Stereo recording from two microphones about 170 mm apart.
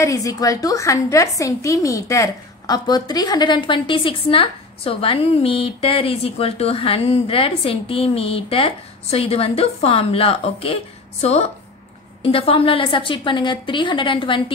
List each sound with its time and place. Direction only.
0.0 s a woman's voice: 20° left (ahead or behind)